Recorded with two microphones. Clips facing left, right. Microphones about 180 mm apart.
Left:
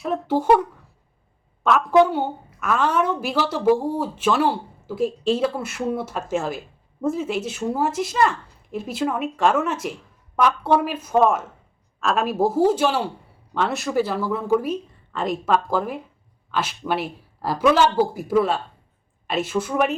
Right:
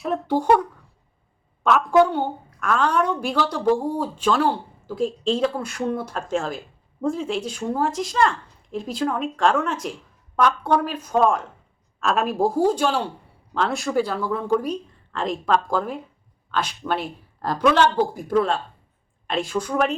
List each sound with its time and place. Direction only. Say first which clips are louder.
0.0 s a woman's voice: even; 5° left (ahead or behind)
1.6 s a woman's voice: left 1 dB; centre (ahead or behind)